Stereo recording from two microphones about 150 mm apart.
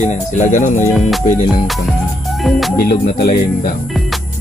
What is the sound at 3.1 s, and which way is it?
Speech, 70° left (ahead or behind).